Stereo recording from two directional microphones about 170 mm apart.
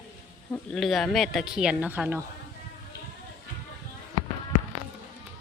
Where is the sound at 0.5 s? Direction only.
5° left (ahead or behind).